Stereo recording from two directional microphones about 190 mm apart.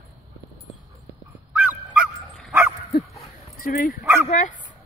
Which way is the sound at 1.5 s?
10° right (ahead or behind).